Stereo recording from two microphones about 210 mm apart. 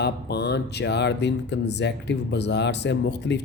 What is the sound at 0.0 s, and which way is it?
Speech, 50° left (ahead or behind).